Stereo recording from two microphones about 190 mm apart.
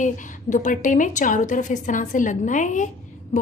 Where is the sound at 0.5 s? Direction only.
40° left (ahead or behind).